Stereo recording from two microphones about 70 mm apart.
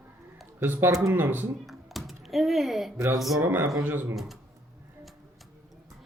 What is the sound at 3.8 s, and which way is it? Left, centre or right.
Speech, right.